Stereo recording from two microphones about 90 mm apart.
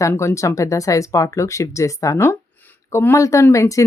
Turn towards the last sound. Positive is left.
turn(degrees=35)  # may be behind; listen again after turning